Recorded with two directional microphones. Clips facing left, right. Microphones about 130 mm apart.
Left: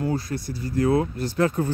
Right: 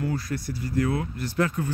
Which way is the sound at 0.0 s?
25° left (ahead or behind).